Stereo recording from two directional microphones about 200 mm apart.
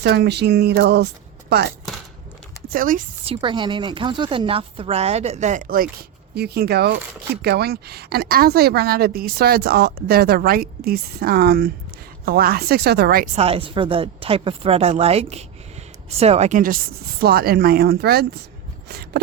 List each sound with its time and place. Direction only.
0.0 s speech: 55° right (ahead or behind)
2.7 s a woman's voice: 45° right (ahead or behind)
3.2 s a woman's voice: 25° right (ahead or behind); by 13.2 s 55° right (ahead or behind)
13.3 s a woman's voice: 30° right (ahead or behind); by 18.3 s 50° right (ahead or behind)
18.9 s a sound: 50° right (ahead or behind)